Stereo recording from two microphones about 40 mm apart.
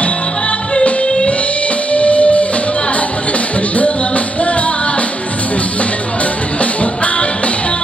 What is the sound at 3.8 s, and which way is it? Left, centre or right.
Music, left.